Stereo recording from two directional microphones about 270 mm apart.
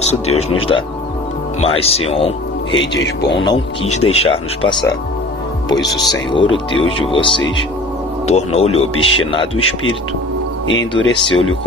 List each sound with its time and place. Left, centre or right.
0.1 s speech: left
6.3 s speech: centre
10.7 s speech: left
11.1 s speech: centre